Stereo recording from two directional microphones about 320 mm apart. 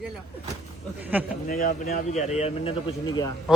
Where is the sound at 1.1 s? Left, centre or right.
Centre.